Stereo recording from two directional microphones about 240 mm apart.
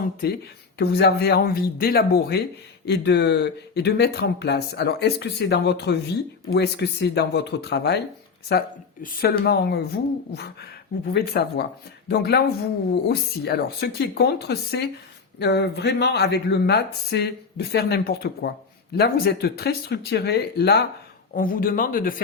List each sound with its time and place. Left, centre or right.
0.8 s speech: left